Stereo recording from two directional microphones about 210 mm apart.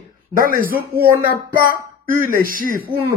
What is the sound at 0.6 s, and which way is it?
Speech, 45° right (ahead or behind).